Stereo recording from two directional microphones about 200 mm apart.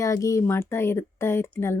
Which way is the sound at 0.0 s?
15° left (ahead or behind).